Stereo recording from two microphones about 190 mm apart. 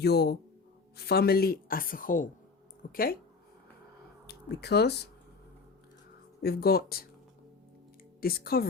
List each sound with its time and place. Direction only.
0.0 s speech: 55° left (ahead or behind)
4.3 s speech: 60° left (ahead or behind)
6.4 s speech: 55° left (ahead or behind)
8.2 s speech: 55° left (ahead or behind)